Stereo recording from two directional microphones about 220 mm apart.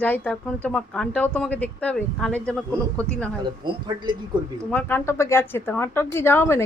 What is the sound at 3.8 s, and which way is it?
Speech, 20° right (ahead or behind).